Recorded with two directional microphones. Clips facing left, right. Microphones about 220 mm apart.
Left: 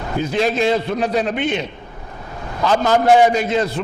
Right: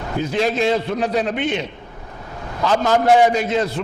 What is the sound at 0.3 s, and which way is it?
A man's voice, 15° left (ahead or behind).